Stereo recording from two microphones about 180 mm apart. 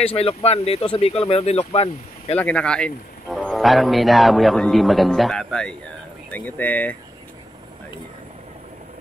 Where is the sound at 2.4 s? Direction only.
5° left (ahead or behind).